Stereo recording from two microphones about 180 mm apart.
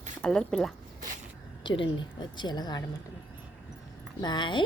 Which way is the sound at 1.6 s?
25° left (ahead or behind).